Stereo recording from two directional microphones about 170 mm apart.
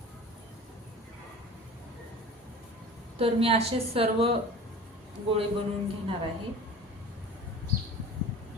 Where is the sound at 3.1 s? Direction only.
35° right (ahead or behind).